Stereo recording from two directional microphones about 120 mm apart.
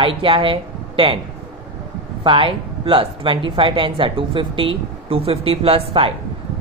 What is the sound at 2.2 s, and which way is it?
Speech, 45° right (ahead or behind).